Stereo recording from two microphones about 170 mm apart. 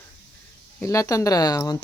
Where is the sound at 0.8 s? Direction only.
15° left (ahead or behind).